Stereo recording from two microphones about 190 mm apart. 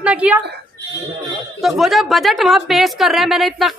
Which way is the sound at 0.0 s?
5° right (ahead or behind).